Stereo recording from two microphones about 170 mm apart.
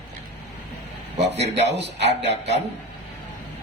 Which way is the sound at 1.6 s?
90° right.